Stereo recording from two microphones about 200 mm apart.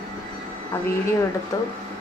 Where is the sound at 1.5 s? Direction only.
15° left (ahead or behind).